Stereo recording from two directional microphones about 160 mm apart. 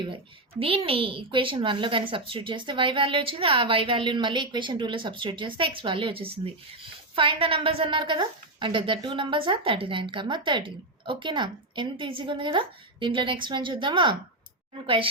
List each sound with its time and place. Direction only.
0.6 s a woman's voice: 35° right (ahead or behind)